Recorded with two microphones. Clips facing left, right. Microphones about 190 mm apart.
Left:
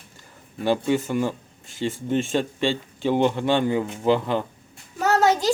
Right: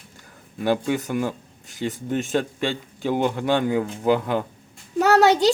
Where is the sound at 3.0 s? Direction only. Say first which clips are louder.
Left 2 dB; 10° right (ahead or behind).